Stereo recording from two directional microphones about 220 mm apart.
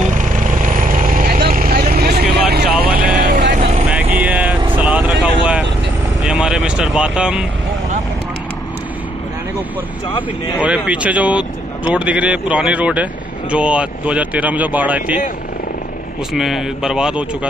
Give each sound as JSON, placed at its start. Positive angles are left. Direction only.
{"t": 0.0, "sound": "vehicle", "side_deg": -35}
{"t": 3.9, "sound": "vehicle", "side_deg": -5}
{"t": 10.6, "sound": "speech", "side_deg": -5}
{"t": 16.3, "sound": "a man's voice", "side_deg": 0}